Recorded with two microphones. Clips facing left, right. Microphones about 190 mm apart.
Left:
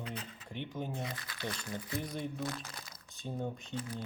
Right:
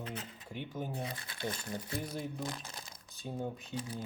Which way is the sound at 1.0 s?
30° right (ahead or behind).